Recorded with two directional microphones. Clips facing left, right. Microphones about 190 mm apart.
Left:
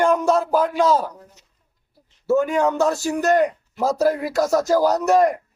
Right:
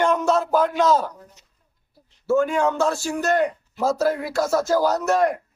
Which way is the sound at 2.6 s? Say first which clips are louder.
Left 2 dB; 15° left (ahead or behind).